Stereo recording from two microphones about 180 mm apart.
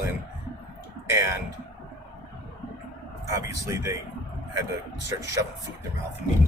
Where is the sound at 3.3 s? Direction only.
15° right (ahead or behind).